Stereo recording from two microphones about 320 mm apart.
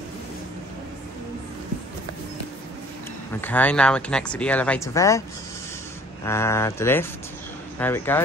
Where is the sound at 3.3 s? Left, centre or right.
Centre.